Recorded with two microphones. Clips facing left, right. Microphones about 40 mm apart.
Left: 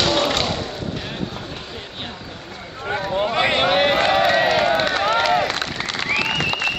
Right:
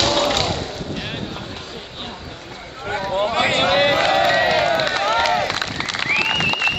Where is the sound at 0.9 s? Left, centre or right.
Centre.